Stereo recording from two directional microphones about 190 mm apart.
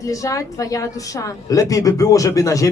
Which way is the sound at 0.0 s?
15° left (ahead or behind).